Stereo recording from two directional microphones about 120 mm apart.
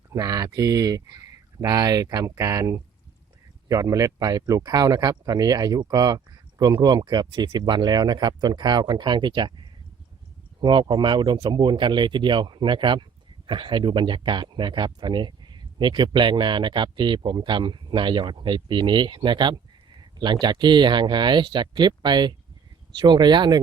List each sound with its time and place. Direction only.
0.1 s speech: 30° right (ahead or behind)